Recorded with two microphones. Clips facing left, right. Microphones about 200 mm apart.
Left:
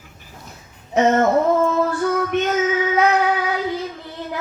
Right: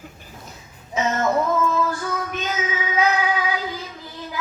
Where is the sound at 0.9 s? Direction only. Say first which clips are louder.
Left 6 dB; 60° left (ahead or behind).